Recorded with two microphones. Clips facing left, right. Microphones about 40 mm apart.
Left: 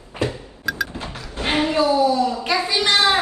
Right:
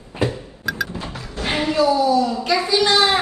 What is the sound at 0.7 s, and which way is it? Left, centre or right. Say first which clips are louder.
Music: even; centre.